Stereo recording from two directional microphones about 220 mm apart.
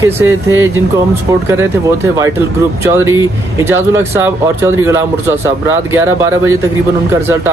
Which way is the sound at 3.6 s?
10° right (ahead or behind).